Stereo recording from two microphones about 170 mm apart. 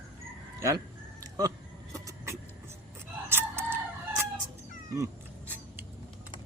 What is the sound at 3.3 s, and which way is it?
Crowing, 15° right (ahead or behind).